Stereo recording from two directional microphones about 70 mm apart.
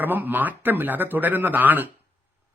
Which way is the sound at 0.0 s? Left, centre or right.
Right.